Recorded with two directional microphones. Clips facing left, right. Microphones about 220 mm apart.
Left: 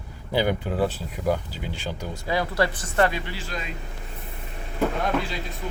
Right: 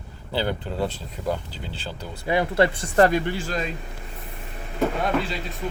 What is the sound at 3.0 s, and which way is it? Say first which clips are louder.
Speech: right 5 dB; 45° right (ahead or behind).